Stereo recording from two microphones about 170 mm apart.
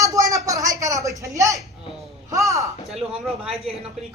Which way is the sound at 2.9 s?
Centre (ahead or behind).